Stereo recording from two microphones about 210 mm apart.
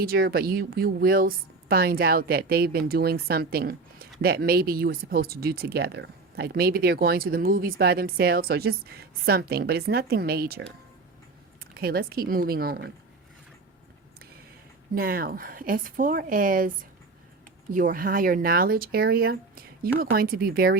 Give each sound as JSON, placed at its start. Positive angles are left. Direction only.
{"t": 0.0, "sound": "speech", "side_deg": -45}
{"t": 11.6, "sound": "speech", "side_deg": -45}
{"t": 14.9, "sound": "speech", "side_deg": -45}